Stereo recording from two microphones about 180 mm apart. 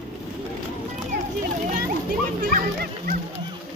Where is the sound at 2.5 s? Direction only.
50° right (ahead or behind).